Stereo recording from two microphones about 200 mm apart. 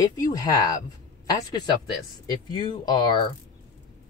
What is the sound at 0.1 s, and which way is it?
Speech, 20° left (ahead or behind).